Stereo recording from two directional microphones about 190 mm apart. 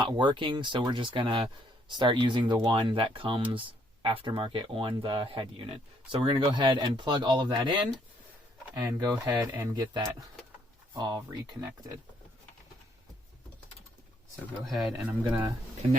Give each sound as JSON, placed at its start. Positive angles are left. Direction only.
{"t": 0.0, "sound": "speech", "side_deg": -25}
{"t": 14.6, "sound": "speech", "side_deg": 0}